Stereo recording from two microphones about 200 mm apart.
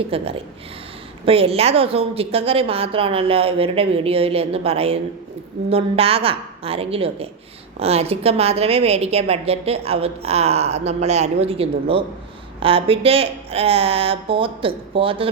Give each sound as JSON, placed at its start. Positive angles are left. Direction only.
{"t": 0.1, "sound": "a woman's voice", "side_deg": -30}